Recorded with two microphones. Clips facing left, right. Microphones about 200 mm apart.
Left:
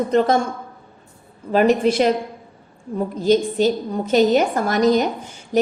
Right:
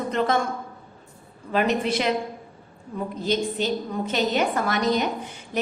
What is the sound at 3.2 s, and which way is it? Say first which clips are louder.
A woman's voice: left 8 dB; 40° left (ahead or behind).